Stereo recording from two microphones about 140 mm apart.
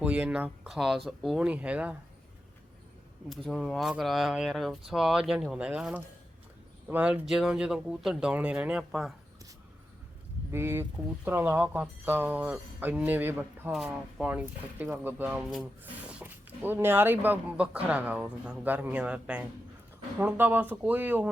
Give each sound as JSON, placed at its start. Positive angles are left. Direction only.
{"t": 0.0, "sound": "speech", "side_deg": -10}
{"t": 3.2, "sound": "speech", "side_deg": 0}
{"t": 10.5, "sound": "speech", "side_deg": -15}